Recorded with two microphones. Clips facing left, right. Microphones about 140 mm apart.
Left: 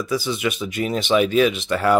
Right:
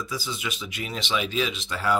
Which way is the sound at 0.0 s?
65° left (ahead or behind).